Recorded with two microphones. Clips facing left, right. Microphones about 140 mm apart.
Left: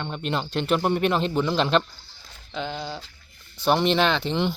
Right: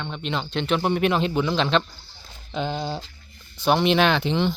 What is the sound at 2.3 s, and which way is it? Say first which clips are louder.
Speech: right 4 dB; 20° right (ahead or behind).